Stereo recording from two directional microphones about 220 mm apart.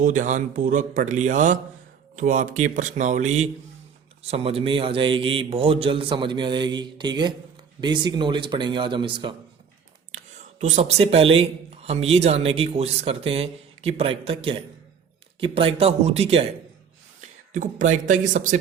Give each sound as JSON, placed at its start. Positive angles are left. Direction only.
{"t": 0.0, "sound": "a man's voice", "side_deg": -35}
{"t": 10.1, "sound": "a man's voice", "side_deg": -30}